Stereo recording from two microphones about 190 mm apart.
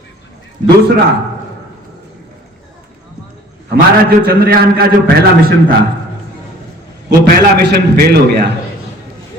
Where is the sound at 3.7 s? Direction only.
55° right (ahead or behind).